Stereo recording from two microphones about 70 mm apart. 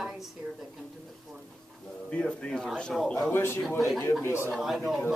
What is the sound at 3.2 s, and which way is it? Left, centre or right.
Speech, left.